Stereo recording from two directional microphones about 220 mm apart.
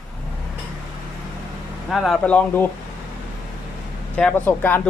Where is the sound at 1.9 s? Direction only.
Centre (ahead or behind).